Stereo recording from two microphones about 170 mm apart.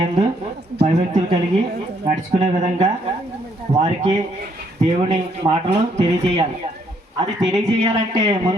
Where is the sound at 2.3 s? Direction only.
35° right (ahead or behind).